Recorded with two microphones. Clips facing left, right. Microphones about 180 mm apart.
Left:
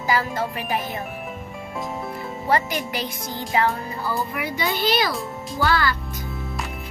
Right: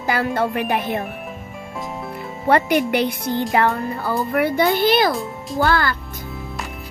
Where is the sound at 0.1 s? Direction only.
60° right (ahead or behind).